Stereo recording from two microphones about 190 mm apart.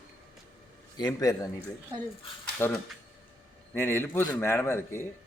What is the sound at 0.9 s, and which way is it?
Speech, 20° left (ahead or behind).